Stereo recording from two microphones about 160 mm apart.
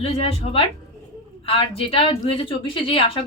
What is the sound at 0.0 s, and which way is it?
Speech, 40° left (ahead or behind).